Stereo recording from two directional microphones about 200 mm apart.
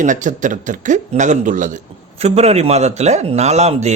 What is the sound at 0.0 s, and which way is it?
Speech, 40° right (ahead or behind).